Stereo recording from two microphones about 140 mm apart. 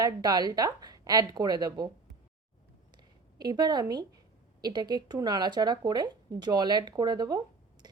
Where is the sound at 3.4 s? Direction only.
30° right (ahead or behind).